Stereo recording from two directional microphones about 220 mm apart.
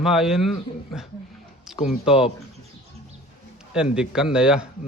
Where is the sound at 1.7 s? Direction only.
Centre (ahead or behind).